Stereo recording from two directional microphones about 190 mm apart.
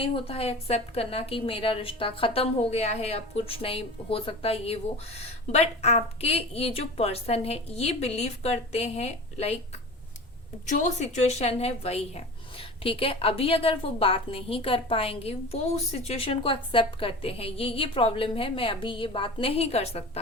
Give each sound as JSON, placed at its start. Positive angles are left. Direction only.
{"t": 0.0, "sound": "a woman's voice", "side_deg": 30}